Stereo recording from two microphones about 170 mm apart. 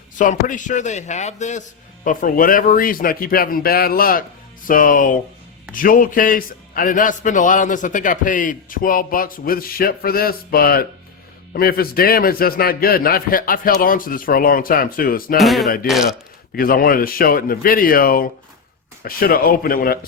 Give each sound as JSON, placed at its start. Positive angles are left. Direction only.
{"t": 0.2, "sound": "a man's voice", "side_deg": 50}
{"t": 2.0, "sound": "a man's voice", "side_deg": 55}
{"t": 15.4, "sound": "a sound", "side_deg": 0}
{"t": 16.6, "sound": "a man's voice", "side_deg": 60}